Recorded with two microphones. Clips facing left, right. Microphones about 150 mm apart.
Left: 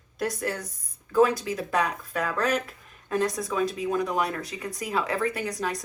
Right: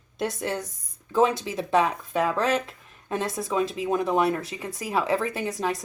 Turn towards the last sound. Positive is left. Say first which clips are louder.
# right 1 dB
turn(degrees=-25)  # may be behind; listen again after turning